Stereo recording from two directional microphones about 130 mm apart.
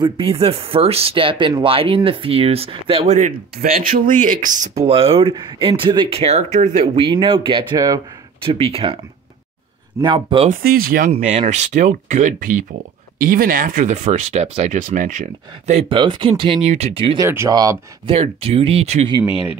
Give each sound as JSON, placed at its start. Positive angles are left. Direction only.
{"t": 0.0, "sound": "speech", "side_deg": -45}
{"t": 4.8, "sound": "speech", "side_deg": -50}
{"t": 6.2, "sound": "speech", "side_deg": -60}
{"t": 7.0, "sound": "speech", "side_deg": -40}
{"t": 10.0, "sound": "speech", "side_deg": -40}
{"t": 10.5, "sound": "speech", "side_deg": -90}
{"t": 11.1, "sound": "speech", "side_deg": -60}
{"t": 15.9, "sound": "speech", "side_deg": -40}
{"t": 16.6, "sound": "speech", "side_deg": -55}
{"t": 17.2, "sound": "speech", "side_deg": -20}
{"t": 18.0, "sound": "speech", "side_deg": -50}
{"t": 19.1, "sound": "speech", "side_deg": 40}